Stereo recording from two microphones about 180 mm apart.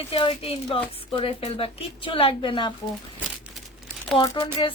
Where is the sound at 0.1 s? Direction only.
30° left (ahead or behind).